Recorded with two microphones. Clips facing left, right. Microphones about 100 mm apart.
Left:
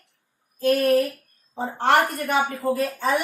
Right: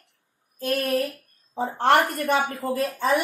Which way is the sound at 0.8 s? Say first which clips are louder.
Left 4 dB; 35° left (ahead or behind).